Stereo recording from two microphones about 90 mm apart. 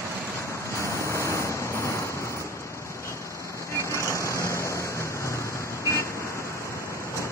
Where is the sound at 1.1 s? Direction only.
35° left (ahead or behind).